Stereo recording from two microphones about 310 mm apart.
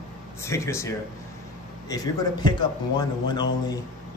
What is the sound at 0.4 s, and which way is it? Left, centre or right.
Speech, centre.